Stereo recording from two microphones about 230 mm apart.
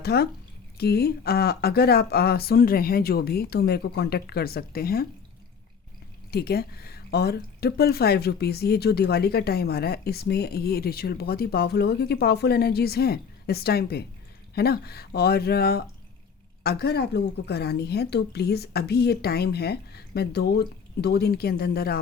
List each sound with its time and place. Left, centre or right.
0.0 s speech: left
6.3 s speech: left